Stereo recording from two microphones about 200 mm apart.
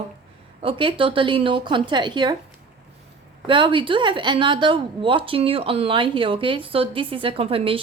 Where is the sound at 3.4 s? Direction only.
25° right (ahead or behind).